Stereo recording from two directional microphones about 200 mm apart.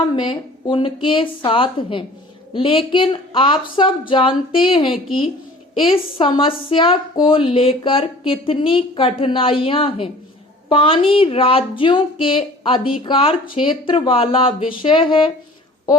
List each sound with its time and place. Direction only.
0.2 s a woman's voice: 25° left (ahead or behind)